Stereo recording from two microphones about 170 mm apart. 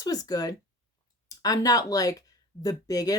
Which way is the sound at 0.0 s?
20° left (ahead or behind).